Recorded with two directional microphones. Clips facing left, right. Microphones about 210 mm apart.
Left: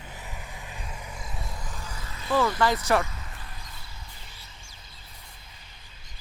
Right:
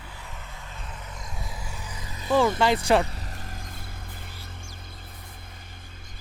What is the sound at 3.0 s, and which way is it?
Vehicle, 35° right (ahead or behind).